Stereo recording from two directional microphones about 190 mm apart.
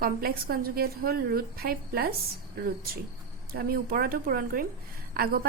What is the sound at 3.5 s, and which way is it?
A woman's voice, 50° right (ahead or behind).